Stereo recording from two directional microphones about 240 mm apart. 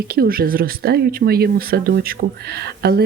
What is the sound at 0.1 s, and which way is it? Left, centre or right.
A woman's voice, right.